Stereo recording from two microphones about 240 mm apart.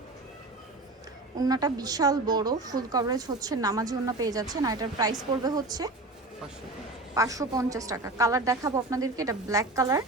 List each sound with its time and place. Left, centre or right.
1.4 s a woman's voice: centre
7.1 s a woman's voice: centre